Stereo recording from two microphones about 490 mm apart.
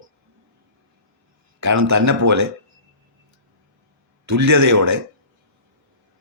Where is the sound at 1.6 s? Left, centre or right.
Right.